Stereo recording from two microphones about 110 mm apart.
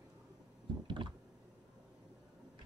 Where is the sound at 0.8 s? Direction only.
50° right (ahead or behind).